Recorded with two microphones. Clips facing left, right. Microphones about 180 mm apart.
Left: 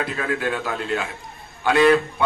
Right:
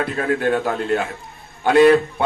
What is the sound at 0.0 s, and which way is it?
A man's voice, 45° right (ahead or behind).